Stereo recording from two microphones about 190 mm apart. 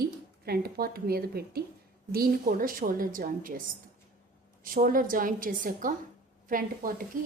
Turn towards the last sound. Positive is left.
turn(degrees=-45)  # may be behind; listen again after turning